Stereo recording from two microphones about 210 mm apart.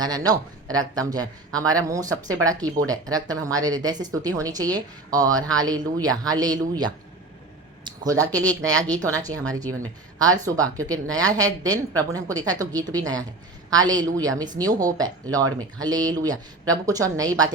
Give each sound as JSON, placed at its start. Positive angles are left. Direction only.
{"t": 0.0, "sound": "speech", "side_deg": -20}
{"t": 7.9, "sound": "a sound", "side_deg": -15}
{"t": 8.3, "sound": "speech", "side_deg": -15}